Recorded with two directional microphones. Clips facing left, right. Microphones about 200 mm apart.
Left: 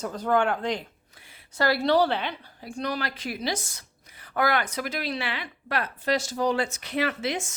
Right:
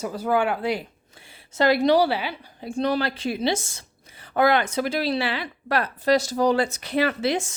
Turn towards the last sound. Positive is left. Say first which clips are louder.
# right 5 dB
turn(degrees=-35)  # may be behind; listen again after turning